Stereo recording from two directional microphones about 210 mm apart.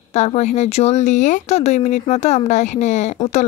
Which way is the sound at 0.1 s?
30° left (ahead or behind).